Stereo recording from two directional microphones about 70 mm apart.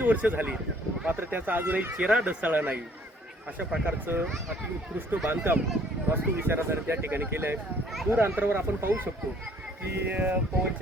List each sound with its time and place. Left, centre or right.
0.0 s speech: right
3.8 s speech: right
10.1 s speech: right